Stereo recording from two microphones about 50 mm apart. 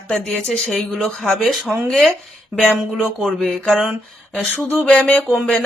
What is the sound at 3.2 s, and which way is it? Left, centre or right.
Speech, centre.